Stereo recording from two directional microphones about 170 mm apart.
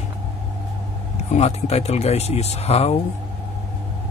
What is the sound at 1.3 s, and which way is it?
Speech, 40° left (ahead or behind).